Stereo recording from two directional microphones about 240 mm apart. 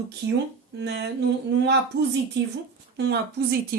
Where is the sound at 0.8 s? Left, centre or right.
Right.